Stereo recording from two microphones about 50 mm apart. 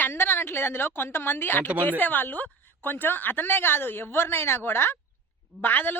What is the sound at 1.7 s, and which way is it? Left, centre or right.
Speech, right.